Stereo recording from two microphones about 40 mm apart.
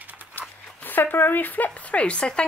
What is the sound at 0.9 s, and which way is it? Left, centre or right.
Speech, left.